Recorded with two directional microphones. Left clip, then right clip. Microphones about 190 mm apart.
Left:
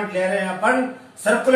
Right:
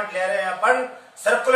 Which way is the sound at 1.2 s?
20° right (ahead or behind).